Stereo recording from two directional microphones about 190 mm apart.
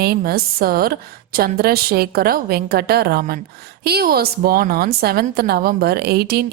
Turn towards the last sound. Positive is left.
turn(degrees=-55)  # may be behind; listen again after turning